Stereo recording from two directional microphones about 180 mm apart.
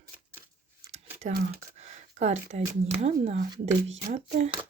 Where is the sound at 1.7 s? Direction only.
40° right (ahead or behind).